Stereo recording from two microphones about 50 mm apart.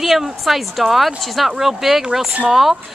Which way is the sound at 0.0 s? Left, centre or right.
Centre.